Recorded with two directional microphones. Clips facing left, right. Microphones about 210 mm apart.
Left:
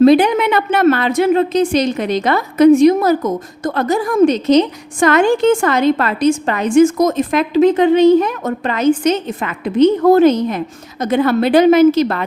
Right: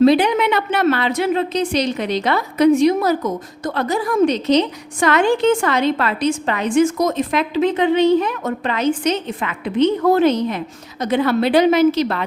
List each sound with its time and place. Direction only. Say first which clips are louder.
0.0 s a woman's voice: left 4 dB; 50° left (ahead or behind)